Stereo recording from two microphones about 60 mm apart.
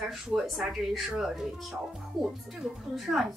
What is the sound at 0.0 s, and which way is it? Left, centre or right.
A woman's voice, centre.